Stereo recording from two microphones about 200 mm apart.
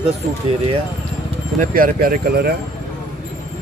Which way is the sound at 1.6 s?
45° right (ahead or behind).